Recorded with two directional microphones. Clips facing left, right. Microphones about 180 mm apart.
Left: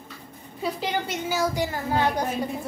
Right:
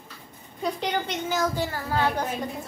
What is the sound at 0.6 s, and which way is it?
A woman's voice, 5° left (ahead or behind).